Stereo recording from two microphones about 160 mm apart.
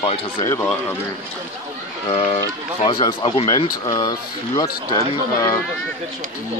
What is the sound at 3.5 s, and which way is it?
Speech, 25° left (ahead or behind).